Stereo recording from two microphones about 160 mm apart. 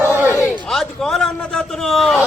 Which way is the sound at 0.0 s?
15° right (ahead or behind).